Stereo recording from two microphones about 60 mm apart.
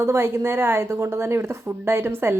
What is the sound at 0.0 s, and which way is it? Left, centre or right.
A woman's voice, right.